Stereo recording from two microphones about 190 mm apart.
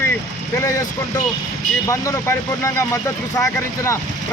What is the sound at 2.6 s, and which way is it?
Speech, 15° left (ahead or behind).